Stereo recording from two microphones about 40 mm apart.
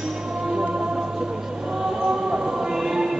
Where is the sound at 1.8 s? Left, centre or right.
Right.